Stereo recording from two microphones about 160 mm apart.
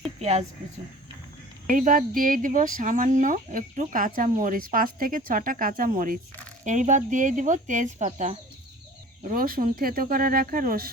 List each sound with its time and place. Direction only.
0.2 s speech: 40° right (ahead or behind)
1.7 s speech: 55° right (ahead or behind)
6.7 s speech: 50° right (ahead or behind)
9.2 s speech: 65° right (ahead or behind)